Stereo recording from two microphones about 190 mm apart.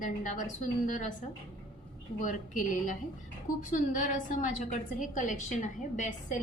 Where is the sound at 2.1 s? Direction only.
45° left (ahead or behind).